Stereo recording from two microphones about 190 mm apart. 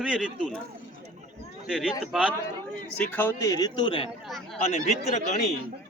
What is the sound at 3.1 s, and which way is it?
Speech, 10° left (ahead or behind).